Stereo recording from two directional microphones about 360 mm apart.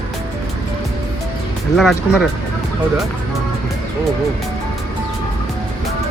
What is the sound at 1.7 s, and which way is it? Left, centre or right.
Speech, centre.